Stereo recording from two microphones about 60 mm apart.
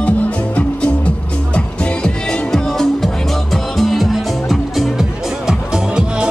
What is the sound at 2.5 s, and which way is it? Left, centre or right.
Music, centre.